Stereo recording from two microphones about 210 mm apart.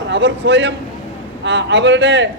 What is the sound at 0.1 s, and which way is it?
A man's voice, 60° right (ahead or behind).